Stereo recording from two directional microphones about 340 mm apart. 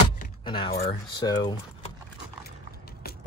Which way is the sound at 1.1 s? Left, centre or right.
Centre.